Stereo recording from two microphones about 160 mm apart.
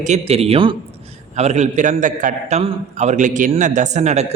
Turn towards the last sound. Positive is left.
turn(degrees=-45)  # may be behind; listen again after turning